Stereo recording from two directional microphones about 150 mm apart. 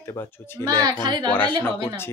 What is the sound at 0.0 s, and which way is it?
Speech, 15° left (ahead or behind).